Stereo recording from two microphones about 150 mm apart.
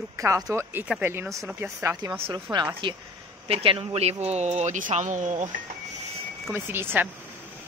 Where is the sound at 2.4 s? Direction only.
30° right (ahead or behind); by 5.4 s 55° right (ahead or behind).